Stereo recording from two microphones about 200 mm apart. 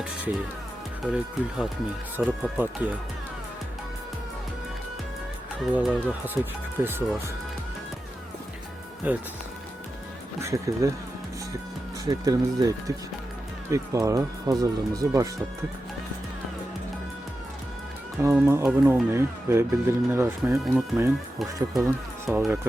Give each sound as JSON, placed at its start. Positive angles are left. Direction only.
{"t": 1.0, "sound": "speech", "side_deg": -5}
{"t": 5.5, "sound": "speech", "side_deg": -5}
{"t": 9.0, "sound": "speech", "side_deg": -10}
{"t": 10.4, "sound": "speech", "side_deg": -15}
{"t": 12.0, "sound": "speech", "side_deg": -20}
{"t": 18.2, "sound": "speech", "side_deg": -10}